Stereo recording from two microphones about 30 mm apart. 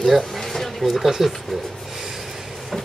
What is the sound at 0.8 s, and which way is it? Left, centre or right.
Speech, centre.